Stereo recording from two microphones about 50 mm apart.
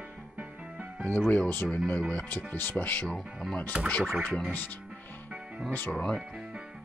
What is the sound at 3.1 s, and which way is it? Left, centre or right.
Speech, centre.